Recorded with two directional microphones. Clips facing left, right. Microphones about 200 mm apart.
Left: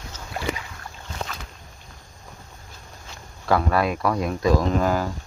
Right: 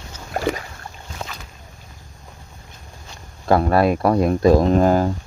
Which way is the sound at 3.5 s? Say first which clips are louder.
Right 5 dB; 35° right (ahead or behind).